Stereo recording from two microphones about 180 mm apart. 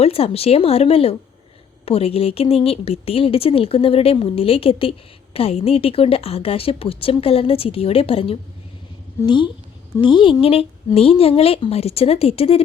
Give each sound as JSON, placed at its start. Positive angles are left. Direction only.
{"t": 0.0, "sound": "a woman's voice", "side_deg": 35}